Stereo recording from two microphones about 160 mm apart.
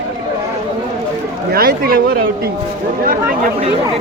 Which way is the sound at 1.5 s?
75° right (ahead or behind).